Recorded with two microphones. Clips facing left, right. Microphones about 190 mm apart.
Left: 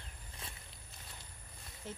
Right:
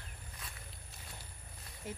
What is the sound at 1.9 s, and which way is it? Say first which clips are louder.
Speech: right 2 dB; 10° right (ahead or behind).